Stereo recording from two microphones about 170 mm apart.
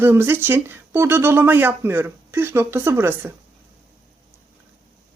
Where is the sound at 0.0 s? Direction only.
15° right (ahead or behind).